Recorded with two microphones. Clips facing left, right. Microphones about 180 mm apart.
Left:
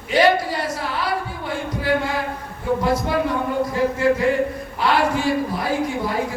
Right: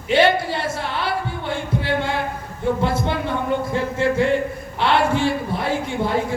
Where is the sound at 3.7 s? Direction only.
25° right (ahead or behind).